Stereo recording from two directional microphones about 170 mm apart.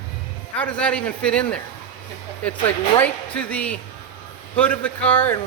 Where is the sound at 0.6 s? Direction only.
5° left (ahead or behind).